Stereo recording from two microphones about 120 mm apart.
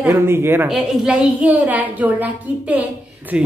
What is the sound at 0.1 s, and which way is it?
Speech, 20° right (ahead or behind).